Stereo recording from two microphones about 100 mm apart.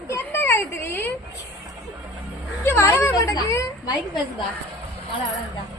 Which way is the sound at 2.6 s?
25° left (ahead or behind).